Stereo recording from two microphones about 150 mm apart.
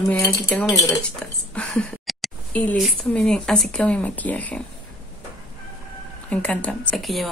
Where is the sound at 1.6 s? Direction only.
5° left (ahead or behind).